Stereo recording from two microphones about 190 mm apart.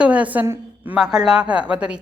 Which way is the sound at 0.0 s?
5° right (ahead or behind).